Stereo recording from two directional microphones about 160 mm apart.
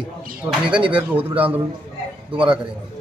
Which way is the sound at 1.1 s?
10° right (ahead or behind).